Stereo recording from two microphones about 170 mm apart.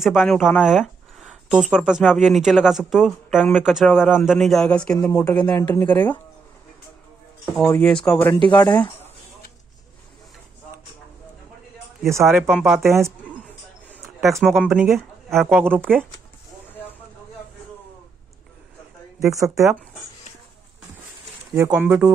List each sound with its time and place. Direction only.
0.2 s speech: 5° left (ahead or behind)
4.9 s speech: 20° left (ahead or behind)
7.5 s speech: 10° left (ahead or behind)
8.1 s speech: 20° left (ahead or behind)
12.0 s speech: 15° right (ahead or behind)
12.6 s speech: centre (ahead or behind)
12.9 s a sound: 15° right (ahead or behind)
14.4 s speech: centre (ahead or behind)
19.1 s a woman's voice: 20° right (ahead or behind)
21.5 s speech: 15° right (ahead or behind)